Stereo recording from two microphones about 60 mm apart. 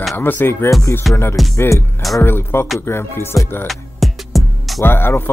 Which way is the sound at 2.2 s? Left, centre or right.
Left.